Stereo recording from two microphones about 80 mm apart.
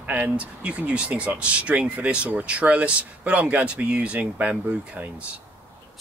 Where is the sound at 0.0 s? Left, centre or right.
Centre.